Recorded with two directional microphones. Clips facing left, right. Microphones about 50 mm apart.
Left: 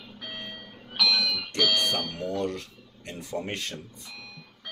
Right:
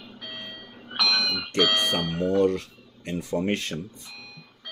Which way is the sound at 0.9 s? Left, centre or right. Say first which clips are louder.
Right 1 dB; centre.